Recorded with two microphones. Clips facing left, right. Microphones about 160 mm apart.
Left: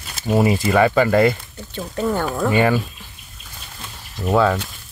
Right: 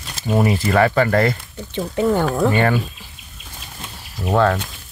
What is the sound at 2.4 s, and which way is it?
Speech, 5° left (ahead or behind).